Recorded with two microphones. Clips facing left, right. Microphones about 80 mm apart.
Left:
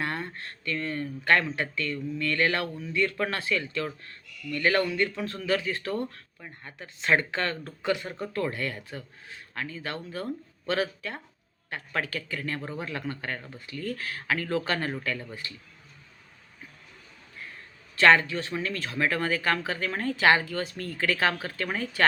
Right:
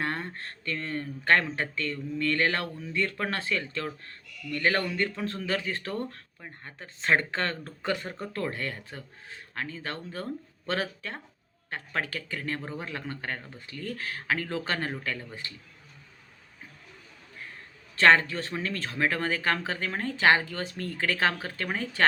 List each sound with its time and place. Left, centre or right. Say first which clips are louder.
0.0 s speech: even; right
17.9 s speech: left 1 dB; right